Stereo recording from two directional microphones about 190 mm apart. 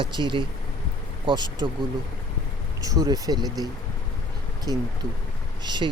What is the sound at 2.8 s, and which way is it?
Speech, 20° right (ahead or behind).